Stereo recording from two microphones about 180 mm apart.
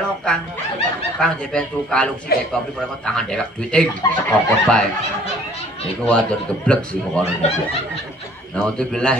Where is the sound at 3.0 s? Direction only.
5° left (ahead or behind).